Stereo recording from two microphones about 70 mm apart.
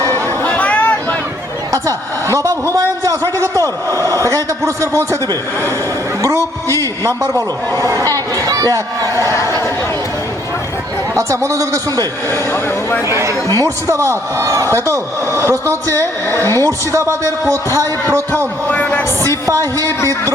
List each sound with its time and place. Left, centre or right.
0.4 s chatter: centre
1.7 s a man's voice: right
6.2 s a man's voice: right
9.1 s a sound: left
11.1 s speech: right
12.3 s speech: left
13.1 s speech: right
18.7 s a man's voice: left
19.5 s a man's voice: right